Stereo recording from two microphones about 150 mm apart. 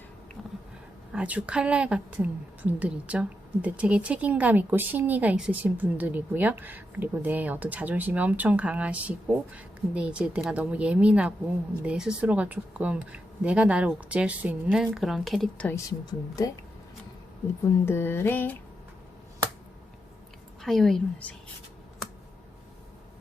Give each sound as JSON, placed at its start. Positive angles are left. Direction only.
{"t": 1.1, "sound": "a woman's voice", "side_deg": -10}
{"t": 15.9, "sound": "speech", "side_deg": 25}
{"t": 17.8, "sound": "a sound", "side_deg": 15}
{"t": 20.6, "sound": "a woman's voice", "side_deg": 0}